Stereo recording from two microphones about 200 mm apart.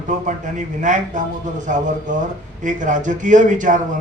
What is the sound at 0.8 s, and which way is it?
Speech, 40° right (ahead or behind).